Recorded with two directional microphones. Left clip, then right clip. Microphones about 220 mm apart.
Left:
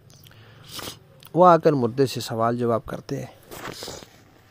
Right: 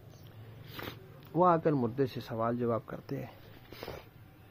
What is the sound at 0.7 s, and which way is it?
Biting, 25° left (ahead or behind).